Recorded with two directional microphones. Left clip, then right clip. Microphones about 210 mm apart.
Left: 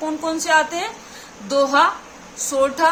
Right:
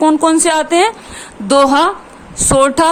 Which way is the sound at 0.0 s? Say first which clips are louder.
Right 13 dB; 50° right (ahead or behind).